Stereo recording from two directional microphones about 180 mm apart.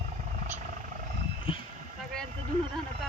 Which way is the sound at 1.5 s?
30° left (ahead or behind).